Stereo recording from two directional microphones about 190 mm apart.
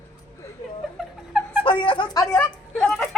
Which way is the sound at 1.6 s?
25° left (ahead or behind).